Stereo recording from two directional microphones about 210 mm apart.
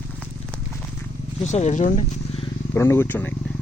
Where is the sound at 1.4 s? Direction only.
35° left (ahead or behind).